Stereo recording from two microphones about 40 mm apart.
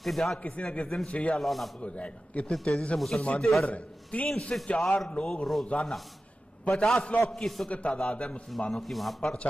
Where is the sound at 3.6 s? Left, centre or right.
Left.